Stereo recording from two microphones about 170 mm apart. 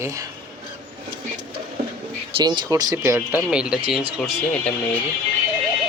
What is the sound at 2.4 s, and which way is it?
Speech, 25° right (ahead or behind).